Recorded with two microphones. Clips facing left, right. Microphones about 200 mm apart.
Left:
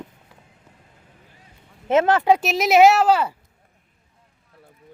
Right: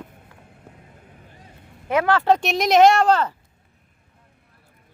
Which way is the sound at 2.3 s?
5° left (ahead or behind).